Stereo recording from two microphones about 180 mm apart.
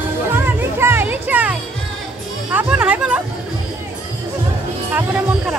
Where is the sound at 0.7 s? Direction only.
15° right (ahead or behind).